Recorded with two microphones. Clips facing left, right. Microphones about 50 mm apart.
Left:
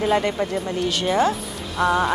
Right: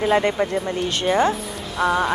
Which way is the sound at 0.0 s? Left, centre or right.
Centre.